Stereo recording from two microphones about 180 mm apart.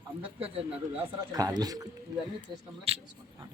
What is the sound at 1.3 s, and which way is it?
Speech, 20° right (ahead or behind).